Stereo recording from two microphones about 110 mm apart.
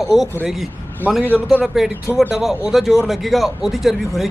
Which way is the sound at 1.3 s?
10° right (ahead or behind).